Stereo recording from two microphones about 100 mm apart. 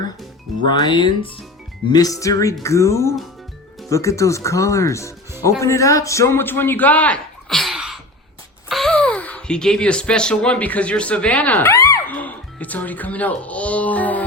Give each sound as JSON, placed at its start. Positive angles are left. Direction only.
{"t": 0.6, "sound": "speech", "side_deg": 50}
{"t": 1.9, "sound": "a man's voice", "side_deg": 40}
{"t": 7.6, "sound": "a sound", "side_deg": -5}
{"t": 8.9, "sound": "speech", "side_deg": 10}
{"t": 11.7, "sound": "a sound", "side_deg": 30}
{"t": 12.0, "sound": "music", "side_deg": 15}